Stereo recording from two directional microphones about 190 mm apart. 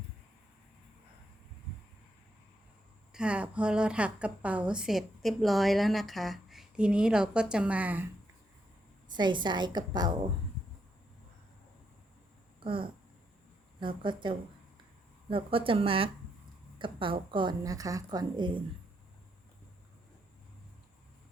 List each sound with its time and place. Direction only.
3.1 s a woman's voice: 5° right (ahead or behind)
9.1 s a woman's voice: 25° right (ahead or behind)
12.5 s a sound: 25° right (ahead or behind)
13.7 s a woman's voice: 25° right (ahead or behind)